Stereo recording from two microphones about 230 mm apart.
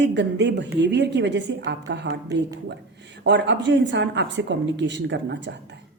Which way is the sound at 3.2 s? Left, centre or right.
Right.